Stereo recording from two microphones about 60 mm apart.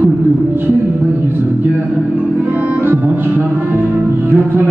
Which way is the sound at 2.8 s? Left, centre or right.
Right.